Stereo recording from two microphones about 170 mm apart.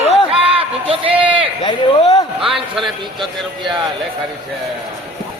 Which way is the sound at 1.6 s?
30° left (ahead or behind).